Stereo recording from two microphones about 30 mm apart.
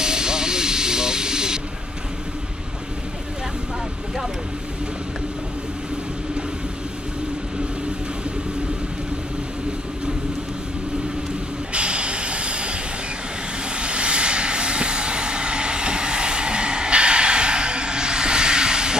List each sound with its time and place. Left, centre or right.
0.0 s vehicle: right
11.7 s a sound: right
13.7 s vehicle: right